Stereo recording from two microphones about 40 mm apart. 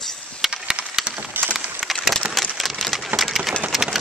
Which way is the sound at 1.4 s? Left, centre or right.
Right.